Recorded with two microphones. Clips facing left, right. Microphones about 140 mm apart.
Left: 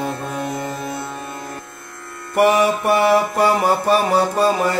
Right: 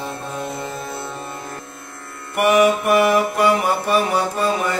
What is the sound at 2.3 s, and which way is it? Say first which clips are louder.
Mantra: even; 30° left (ahead or behind).